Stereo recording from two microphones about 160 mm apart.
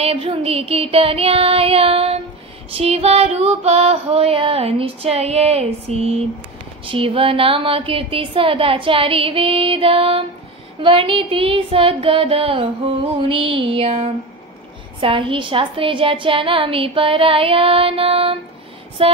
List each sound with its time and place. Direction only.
0.0 s a woman's voice: 40° right (ahead or behind)